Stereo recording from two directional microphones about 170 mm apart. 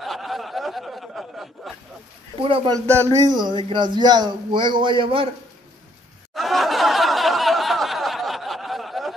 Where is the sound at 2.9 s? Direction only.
15° right (ahead or behind); by 5.3 s 30° right (ahead or behind).